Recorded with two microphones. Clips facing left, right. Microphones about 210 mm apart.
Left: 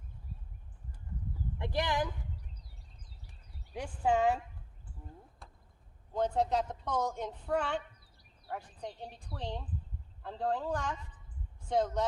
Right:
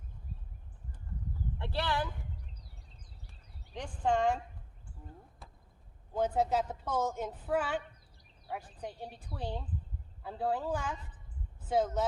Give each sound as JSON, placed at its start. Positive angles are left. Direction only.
{"t": 1.5, "sound": "speech", "side_deg": 15}
{"t": 3.8, "sound": "speech", "side_deg": 5}
{"t": 5.4, "sound": "a sound", "side_deg": 0}
{"t": 6.1, "sound": "speech", "side_deg": -5}